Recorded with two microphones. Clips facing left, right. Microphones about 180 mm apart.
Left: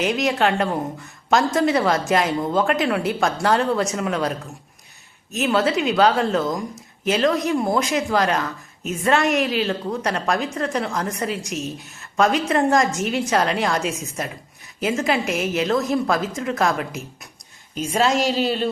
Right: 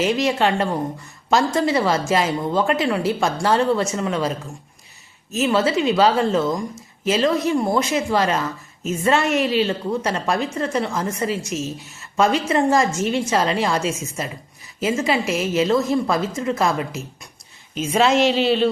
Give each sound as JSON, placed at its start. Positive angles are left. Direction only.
{"t": 0.0, "sound": "speech", "side_deg": 0}
{"t": 18.3, "sound": "a man's voice", "side_deg": 40}